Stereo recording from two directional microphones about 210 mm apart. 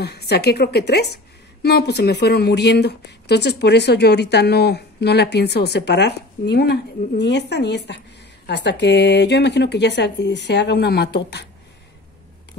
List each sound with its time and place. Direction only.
0.0 s a woman's voice: 50° left (ahead or behind)